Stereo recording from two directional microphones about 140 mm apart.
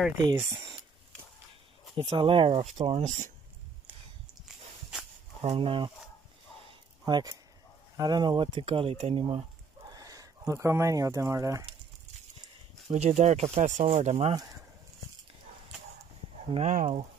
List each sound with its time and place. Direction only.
0.4 s speech: 20° right (ahead or behind)
2.0 s speech: 40° right (ahead or behind); by 3.3 s 55° right (ahead or behind)
5.4 s speech: 45° right (ahead or behind)
7.1 s speech: 30° right (ahead or behind); by 9.4 s 45° right (ahead or behind)
9.8 s speech: 25° right (ahead or behind)
12.9 s speech: 55° right (ahead or behind)
16.0 s a sound: 45° right (ahead or behind)